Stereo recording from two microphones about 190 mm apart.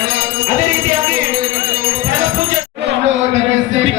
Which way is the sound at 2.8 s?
65° right (ahead or behind).